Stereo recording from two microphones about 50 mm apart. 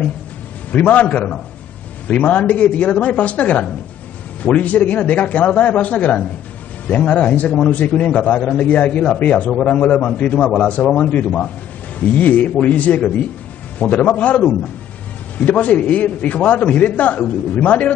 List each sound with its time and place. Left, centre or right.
0.7 s a man's voice: left